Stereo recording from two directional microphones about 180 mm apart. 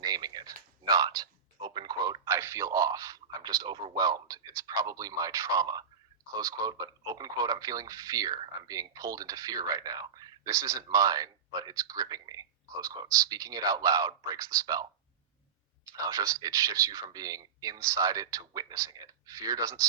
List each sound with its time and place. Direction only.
0.0 s a sound: 20° right (ahead or behind)
6.4 s speech: 20° right (ahead or behind)
16.0 s speech: 20° right (ahead or behind)